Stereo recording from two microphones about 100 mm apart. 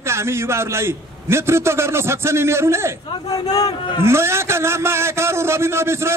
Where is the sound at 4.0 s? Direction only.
25° right (ahead or behind).